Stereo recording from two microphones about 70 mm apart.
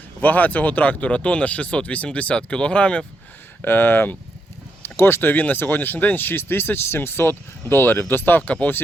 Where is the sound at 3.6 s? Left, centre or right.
Left.